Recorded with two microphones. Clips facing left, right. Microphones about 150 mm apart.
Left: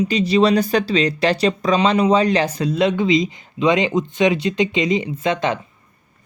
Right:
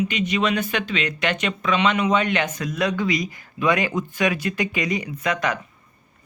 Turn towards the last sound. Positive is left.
turn(degrees=25)  # may be behind; listen again after turning